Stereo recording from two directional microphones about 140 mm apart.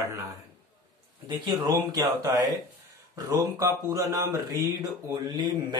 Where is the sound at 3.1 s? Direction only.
20° right (ahead or behind).